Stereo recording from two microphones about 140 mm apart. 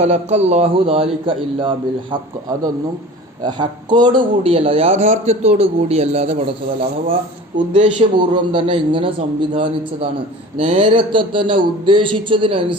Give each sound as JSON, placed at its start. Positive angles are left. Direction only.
{"t": 0.0, "sound": "a man's voice", "side_deg": -50}
{"t": 3.4, "sound": "a man's voice", "side_deg": -30}
{"t": 7.5, "sound": "speech", "side_deg": -60}
{"t": 8.1, "sound": "speech", "side_deg": -35}